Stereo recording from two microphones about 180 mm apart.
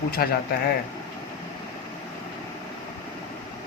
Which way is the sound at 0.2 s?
55° left (ahead or behind).